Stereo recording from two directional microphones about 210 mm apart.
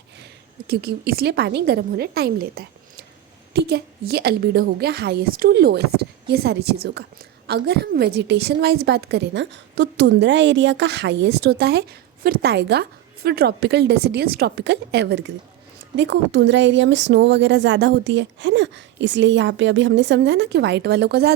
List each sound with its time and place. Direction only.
0.7 s a woman's voice: 45° right (ahead or behind)